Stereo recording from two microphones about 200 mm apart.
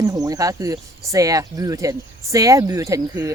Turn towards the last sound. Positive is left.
turn(degrees=-15)  # may be behind; listen again after turning